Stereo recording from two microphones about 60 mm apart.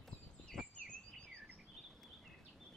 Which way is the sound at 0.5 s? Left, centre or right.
Right.